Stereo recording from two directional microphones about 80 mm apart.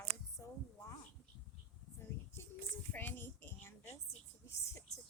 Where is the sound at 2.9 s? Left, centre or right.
Left.